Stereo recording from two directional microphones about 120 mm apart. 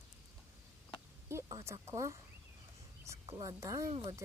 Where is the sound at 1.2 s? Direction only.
20° right (ahead or behind).